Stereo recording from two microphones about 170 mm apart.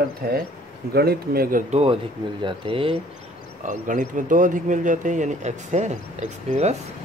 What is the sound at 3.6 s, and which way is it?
Speech, 50° right (ahead or behind).